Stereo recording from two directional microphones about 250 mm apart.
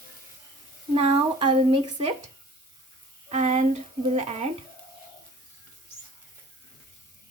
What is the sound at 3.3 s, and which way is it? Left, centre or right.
Speech, right.